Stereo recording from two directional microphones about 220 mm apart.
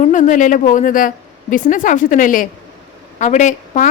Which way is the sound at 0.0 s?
35° left (ahead or behind).